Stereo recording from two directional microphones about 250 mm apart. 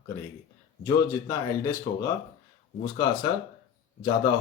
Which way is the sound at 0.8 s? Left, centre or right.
Centre.